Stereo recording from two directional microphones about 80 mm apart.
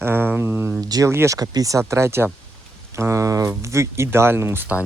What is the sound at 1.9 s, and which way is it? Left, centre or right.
Speech, right.